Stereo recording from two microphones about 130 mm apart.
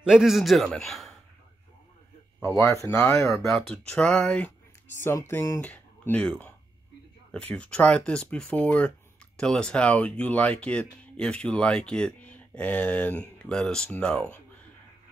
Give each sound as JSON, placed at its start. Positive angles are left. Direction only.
{"t": 0.0, "sound": "a man's voice", "side_deg": -5}
{"t": 2.4, "sound": "speech", "side_deg": 25}
{"t": 3.3, "sound": "speech", "side_deg": 5}
{"t": 5.3, "sound": "speech", "side_deg": 25}
{"t": 5.6, "sound": "speech", "side_deg": 10}
{"t": 7.3, "sound": "speech", "side_deg": 10}